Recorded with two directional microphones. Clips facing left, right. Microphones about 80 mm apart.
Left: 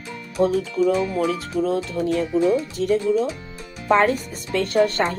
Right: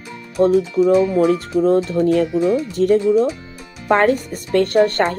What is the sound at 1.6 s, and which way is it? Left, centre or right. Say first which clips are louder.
Speech: right 8 dB; right.